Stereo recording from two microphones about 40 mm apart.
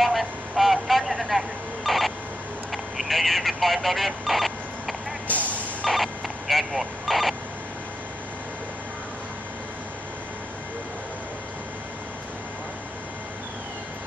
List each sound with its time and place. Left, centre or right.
0.0 s vehicle: centre
2.7 s telephone: centre
5.3 s vehicle: left
5.9 s vehicle: centre